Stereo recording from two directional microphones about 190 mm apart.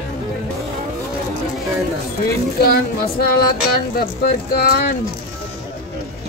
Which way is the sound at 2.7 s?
55° left (ahead or behind).